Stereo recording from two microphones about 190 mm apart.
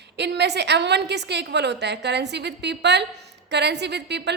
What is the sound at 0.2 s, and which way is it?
A woman's voice, 65° right (ahead or behind).